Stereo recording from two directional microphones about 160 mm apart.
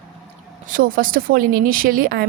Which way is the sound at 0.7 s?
60° right (ahead or behind).